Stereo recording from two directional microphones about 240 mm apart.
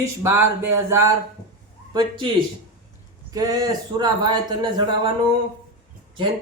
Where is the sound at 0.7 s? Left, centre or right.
Centre.